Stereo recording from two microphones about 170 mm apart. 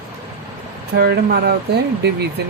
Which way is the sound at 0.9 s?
70° right (ahead or behind).